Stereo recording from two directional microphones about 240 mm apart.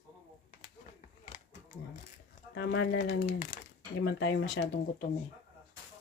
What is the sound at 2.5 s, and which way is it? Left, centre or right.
Speech, left.